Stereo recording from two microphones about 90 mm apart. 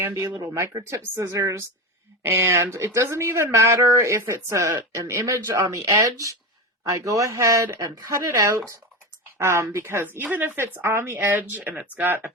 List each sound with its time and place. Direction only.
0.1 s speech: 35° right (ahead or behind)